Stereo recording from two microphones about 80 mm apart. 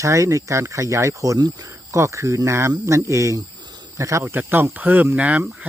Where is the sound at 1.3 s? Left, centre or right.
Right.